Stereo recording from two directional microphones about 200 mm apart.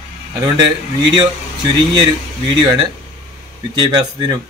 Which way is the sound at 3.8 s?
20° right (ahead or behind).